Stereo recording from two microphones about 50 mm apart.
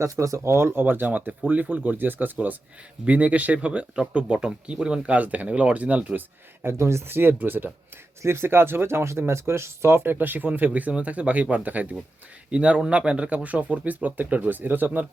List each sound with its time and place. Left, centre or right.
0.0 s speech: right
0.9 s speech: right
3.1 s speech: right
6.1 s speech: right
6.7 s speech: right
7.1 s speech: right
8.2 s speech: right
10.2 s speech: right
10.7 s speech: right